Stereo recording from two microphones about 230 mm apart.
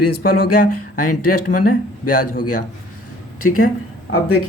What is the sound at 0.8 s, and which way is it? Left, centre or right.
Speech, left.